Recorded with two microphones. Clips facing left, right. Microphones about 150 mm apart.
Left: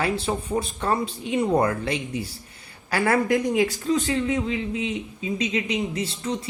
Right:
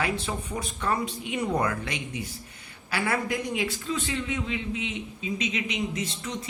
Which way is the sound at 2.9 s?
50° left (ahead or behind).